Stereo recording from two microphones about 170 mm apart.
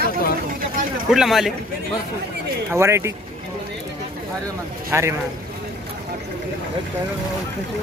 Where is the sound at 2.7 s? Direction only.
15° right (ahead or behind).